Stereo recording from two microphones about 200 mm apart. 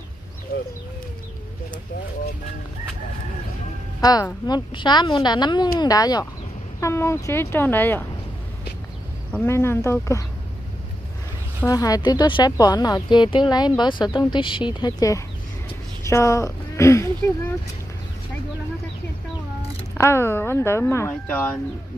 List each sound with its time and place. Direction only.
4.0 s speech: 20° left (ahead or behind)
9.3 s speech: 10° left (ahead or behind)
11.6 s speech: 15° left (ahead or behind)
20.0 s speech: 10° left (ahead or behind)